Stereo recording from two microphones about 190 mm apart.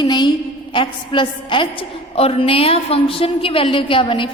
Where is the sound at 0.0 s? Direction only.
25° left (ahead or behind).